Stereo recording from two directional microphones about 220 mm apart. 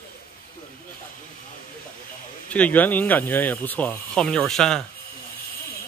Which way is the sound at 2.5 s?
5° left (ahead or behind).